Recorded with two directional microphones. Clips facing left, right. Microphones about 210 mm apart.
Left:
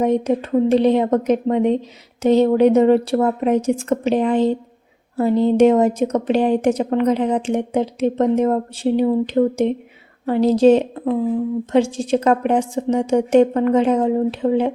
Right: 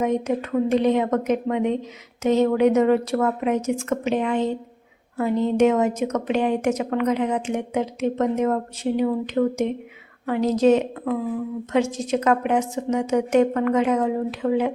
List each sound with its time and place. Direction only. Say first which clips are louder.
0.0 s speech: left 5 dB; 30° left (ahead or behind)